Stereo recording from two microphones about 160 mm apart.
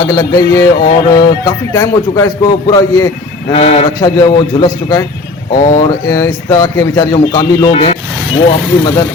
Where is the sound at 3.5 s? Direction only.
35° left (ahead or behind).